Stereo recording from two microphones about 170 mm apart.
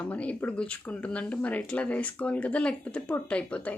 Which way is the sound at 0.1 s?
10° left (ahead or behind).